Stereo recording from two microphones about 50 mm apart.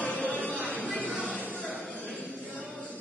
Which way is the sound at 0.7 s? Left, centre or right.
Left.